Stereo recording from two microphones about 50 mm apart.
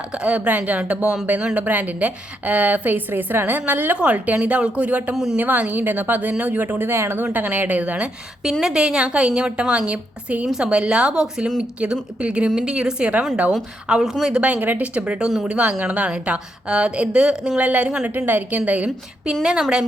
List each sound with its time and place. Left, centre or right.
0.1 s a woman's voice: right
5.1 s a woman's voice: centre
5.4 s a woman's voice: right
7.3 s a woman's voice: right
8.6 s a woman's voice: centre
11.8 s a woman's voice: right
14.0 s speech: centre
14.4 s a woman's voice: right
18.3 s a woman's voice: right
19.3 s speech: centre